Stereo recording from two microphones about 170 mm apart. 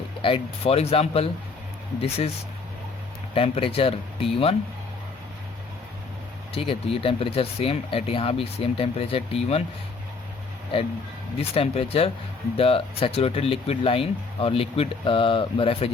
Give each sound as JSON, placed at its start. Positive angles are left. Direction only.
{"t": 0.2, "sound": "speech", "side_deg": 30}
{"t": 3.3, "sound": "speech", "side_deg": 35}
{"t": 6.5, "sound": "speech", "side_deg": 35}
{"t": 11.3, "sound": "speech", "side_deg": 35}